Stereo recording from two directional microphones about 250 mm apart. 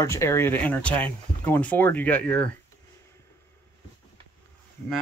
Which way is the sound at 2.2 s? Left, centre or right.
Right.